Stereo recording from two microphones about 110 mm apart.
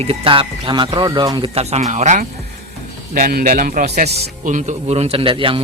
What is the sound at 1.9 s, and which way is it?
Speech, 90° right.